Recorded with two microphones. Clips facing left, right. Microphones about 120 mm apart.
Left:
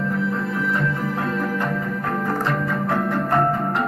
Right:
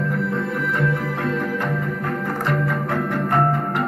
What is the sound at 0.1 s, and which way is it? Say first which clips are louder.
Music: even; centre (ahead or behind).